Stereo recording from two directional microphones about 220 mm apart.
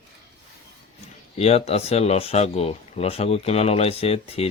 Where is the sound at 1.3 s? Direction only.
30° left (ahead or behind).